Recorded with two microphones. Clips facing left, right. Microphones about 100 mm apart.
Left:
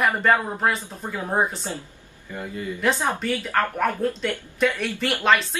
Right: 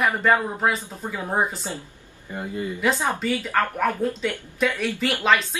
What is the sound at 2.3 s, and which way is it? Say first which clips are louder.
Speech: right 1 dB; 25° right (ahead or behind).